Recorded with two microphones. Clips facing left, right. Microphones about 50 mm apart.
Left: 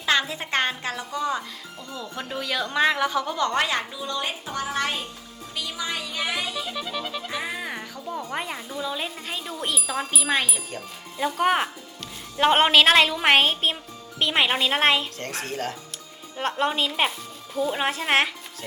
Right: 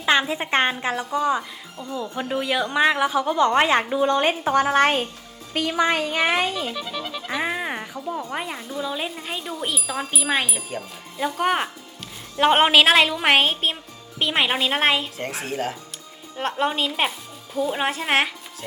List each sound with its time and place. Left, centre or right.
0.0 s a woman's voice: right
6.7 s speech: centre
7.3 s speech: right
8.1 s speech: centre